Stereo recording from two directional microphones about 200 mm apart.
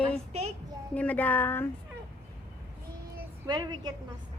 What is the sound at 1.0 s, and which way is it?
Speech, 5° left (ahead or behind).